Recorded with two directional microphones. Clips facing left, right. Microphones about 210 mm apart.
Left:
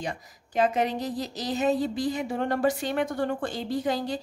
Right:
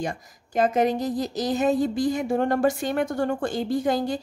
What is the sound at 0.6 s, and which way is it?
A woman's voice, 45° right (ahead or behind).